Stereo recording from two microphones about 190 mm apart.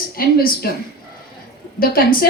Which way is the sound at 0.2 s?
50° left (ahead or behind).